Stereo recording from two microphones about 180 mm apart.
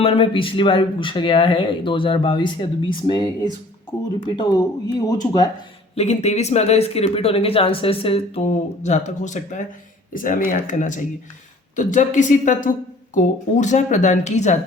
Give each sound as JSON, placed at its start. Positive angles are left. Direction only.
{"t": 0.0, "sound": "speech", "side_deg": 30}
{"t": 5.9, "sound": "speech", "side_deg": 35}